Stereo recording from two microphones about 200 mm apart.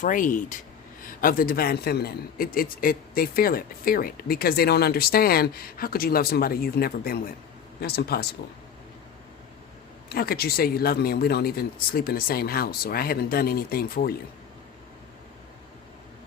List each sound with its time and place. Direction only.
0.0 s a man's voice: 40° left (ahead or behind)
10.1 s a man's voice: 50° left (ahead or behind)